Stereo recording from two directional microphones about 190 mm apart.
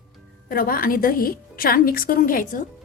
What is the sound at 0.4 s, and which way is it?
A woman's voice, 50° left (ahead or behind).